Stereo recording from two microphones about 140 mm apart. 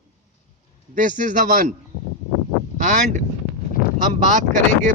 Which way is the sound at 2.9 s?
60° right (ahead or behind).